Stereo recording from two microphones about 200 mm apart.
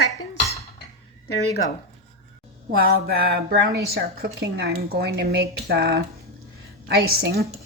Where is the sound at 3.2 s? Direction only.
50° right (ahead or behind).